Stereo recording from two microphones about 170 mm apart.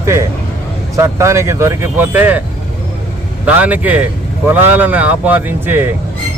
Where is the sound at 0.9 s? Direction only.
15° right (ahead or behind).